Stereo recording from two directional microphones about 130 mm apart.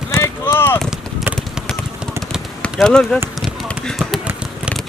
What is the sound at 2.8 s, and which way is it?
Speech, 5° left (ahead or behind).